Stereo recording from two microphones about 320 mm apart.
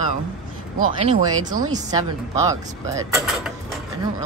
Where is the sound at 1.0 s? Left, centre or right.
Right.